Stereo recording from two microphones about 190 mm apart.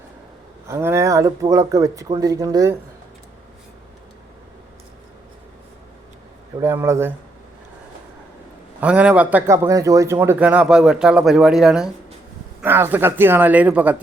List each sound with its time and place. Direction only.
0.7 s speech: 15° right (ahead or behind)
6.6 s speech: 15° right (ahead or behind)
8.8 s speech: 5° right (ahead or behind)